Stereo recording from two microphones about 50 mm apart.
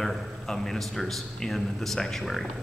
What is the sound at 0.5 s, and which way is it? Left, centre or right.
A man's voice, centre.